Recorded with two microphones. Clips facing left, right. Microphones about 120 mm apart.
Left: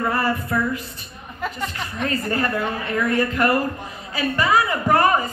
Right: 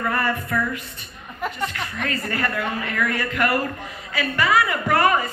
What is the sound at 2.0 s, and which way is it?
A woman's voice, 30° left (ahead or behind).